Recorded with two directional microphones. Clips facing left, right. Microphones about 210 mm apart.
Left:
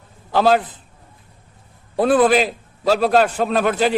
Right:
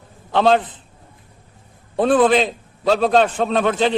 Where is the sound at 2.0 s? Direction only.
5° left (ahead or behind).